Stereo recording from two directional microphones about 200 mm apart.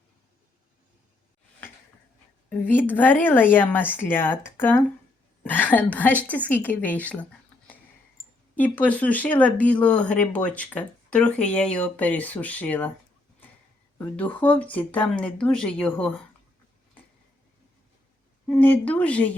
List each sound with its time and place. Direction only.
2.5 s a woman's voice: 10° left (ahead or behind)
8.2 s a sound: 30° left (ahead or behind)
8.5 s speech: 10° left (ahead or behind)
14.0 s speech: 10° left (ahead or behind)
18.4 s speech: 5° left (ahead or behind)